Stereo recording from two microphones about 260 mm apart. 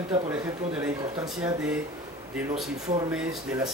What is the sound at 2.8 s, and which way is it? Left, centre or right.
Speech, centre.